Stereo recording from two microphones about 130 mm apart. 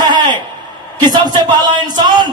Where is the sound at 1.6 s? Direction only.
30° right (ahead or behind).